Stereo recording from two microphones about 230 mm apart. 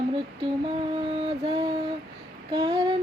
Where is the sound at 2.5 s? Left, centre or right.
Centre.